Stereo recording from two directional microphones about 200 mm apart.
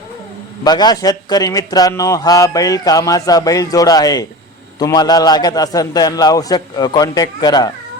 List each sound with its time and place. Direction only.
0.6 s a man's voice: 20° left (ahead or behind)